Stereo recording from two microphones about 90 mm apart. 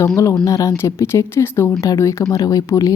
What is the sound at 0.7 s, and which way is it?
Speech, 30° left (ahead or behind).